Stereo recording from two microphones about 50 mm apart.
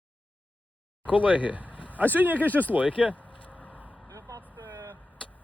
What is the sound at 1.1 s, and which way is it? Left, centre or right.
Speech, right.